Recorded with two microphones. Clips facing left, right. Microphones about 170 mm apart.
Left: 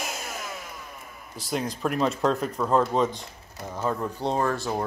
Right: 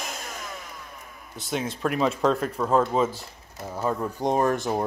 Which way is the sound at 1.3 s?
Centre (ahead or behind).